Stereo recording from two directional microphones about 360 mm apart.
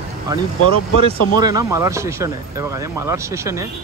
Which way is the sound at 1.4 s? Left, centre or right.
Centre.